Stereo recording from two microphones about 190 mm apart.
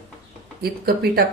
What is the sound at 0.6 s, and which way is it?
Speech, 55° right (ahead or behind).